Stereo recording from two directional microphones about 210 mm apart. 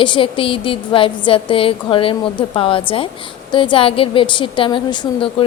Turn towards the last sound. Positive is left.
turn(degrees=25)  # may be behind; listen again after turning